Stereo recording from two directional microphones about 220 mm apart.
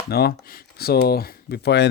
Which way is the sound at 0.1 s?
45° left (ahead or behind).